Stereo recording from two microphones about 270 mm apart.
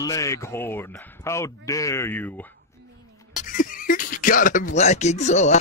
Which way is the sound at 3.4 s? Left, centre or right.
Left.